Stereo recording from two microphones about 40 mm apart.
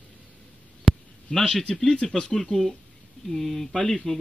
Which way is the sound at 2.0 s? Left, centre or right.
Centre.